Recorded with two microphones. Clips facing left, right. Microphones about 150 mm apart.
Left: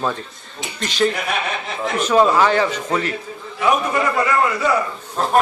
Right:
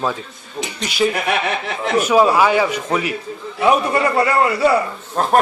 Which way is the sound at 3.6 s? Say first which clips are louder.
Right 3 dB; 35° right (ahead or behind).